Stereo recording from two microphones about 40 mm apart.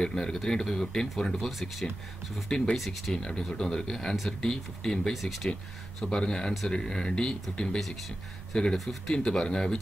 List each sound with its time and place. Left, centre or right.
0.0 s speech: centre
2.5 s speech: centre
2.8 s speech: centre
3.2 s speech: left
5.1 s speech: centre
5.9 s speech: centre
8.7 s speech: centre
9.1 s speech: centre